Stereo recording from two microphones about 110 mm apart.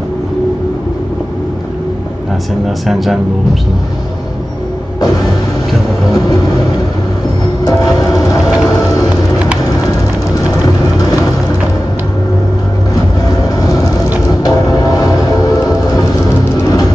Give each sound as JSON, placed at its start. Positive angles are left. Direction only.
{"t": 2.6, "sound": "speech", "side_deg": 0}
{"t": 5.0, "sound": "vehicle", "side_deg": 35}
{"t": 7.6, "sound": "train", "side_deg": 35}
{"t": 9.8, "sound": "vehicle", "side_deg": 35}
{"t": 12.9, "sound": "vehicle", "side_deg": 35}
{"t": 14.4, "sound": "music", "side_deg": 35}